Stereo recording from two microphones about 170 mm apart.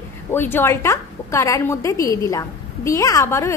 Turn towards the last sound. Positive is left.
turn(degrees=15)  # may be behind; listen again after turning